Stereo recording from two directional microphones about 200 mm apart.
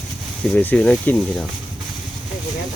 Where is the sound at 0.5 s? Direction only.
5° left (ahead or behind).